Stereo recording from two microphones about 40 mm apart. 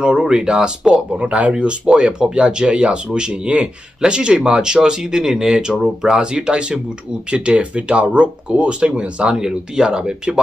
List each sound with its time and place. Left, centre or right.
0.0 s speech: centre
1.1 s speech: right
1.9 s speech: right